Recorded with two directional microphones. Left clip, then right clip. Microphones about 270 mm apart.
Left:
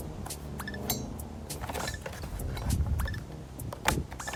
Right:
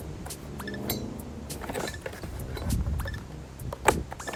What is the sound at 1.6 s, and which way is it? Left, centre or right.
Vehicle, centre.